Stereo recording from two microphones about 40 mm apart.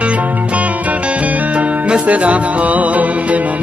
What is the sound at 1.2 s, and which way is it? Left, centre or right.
Music, right.